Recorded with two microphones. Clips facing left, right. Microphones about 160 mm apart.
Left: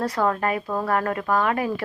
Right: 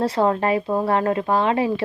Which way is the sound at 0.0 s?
25° right (ahead or behind).